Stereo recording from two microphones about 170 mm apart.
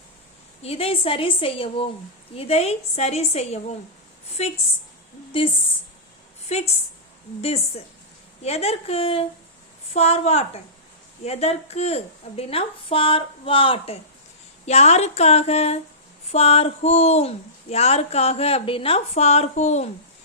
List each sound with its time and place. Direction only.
0.6 s speech: 35° left (ahead or behind)
6.5 s speech: 40° left (ahead or behind)
8.4 s speech: 40° left (ahead or behind)